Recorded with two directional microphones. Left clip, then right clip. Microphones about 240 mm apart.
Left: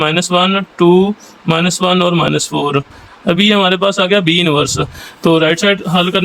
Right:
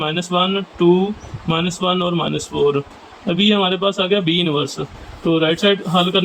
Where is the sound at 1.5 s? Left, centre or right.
Left.